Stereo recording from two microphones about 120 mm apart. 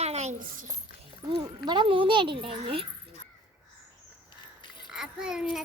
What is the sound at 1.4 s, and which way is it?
A child's voice, 40° right (ahead or behind).